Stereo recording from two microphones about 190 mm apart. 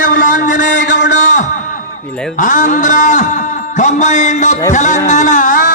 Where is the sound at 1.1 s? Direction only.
40° left (ahead or behind).